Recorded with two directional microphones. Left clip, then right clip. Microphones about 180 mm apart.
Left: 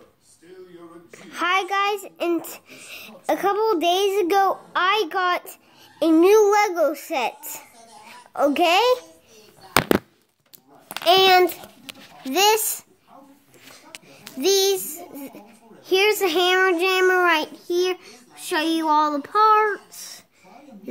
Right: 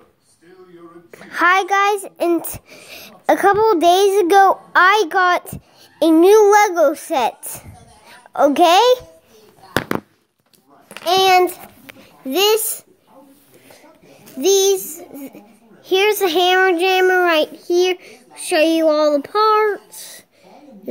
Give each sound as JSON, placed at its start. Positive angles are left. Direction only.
{"t": 1.2, "sound": "a child's voice", "side_deg": -20}
{"t": 11.1, "sound": "a child's voice", "side_deg": -15}
{"t": 12.3, "sound": "a child's voice", "side_deg": 0}
{"t": 14.3, "sound": "a child's voice", "side_deg": -5}